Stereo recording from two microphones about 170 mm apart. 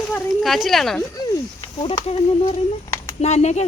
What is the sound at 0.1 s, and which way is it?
Speech, centre (ahead or behind).